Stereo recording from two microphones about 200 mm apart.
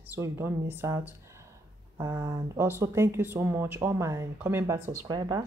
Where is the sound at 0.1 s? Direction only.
10° right (ahead or behind).